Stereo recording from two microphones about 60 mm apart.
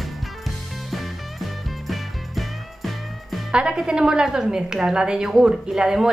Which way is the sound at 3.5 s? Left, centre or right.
Centre.